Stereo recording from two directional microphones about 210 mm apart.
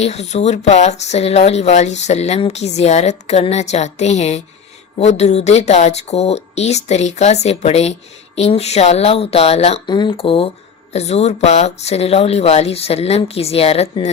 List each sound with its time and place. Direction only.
0.0 s speech: 30° left (ahead or behind)